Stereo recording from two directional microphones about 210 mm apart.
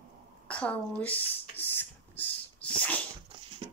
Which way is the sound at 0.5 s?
5° left (ahead or behind).